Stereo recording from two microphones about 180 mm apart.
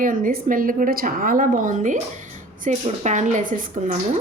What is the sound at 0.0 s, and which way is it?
Speech, 50° right (ahead or behind).